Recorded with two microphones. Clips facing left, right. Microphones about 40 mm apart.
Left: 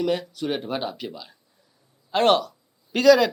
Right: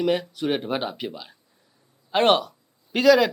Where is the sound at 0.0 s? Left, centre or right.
Centre.